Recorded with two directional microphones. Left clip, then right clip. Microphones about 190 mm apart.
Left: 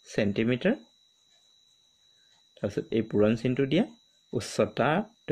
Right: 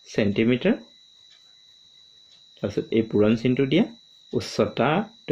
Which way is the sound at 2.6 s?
50° left (ahead or behind).